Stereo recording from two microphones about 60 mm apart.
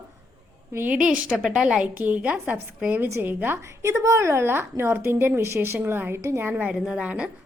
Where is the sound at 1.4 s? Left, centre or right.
Centre.